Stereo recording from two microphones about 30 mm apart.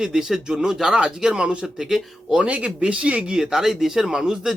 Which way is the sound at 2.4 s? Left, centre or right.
Right.